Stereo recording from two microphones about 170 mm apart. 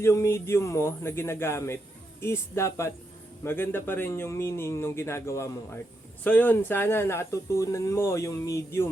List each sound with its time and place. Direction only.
0.0 s speech: 15° left (ahead or behind)